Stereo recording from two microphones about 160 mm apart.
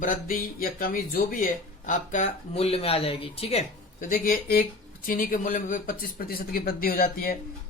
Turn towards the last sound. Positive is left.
turn(degrees=65)  # may be behind; listen again after turning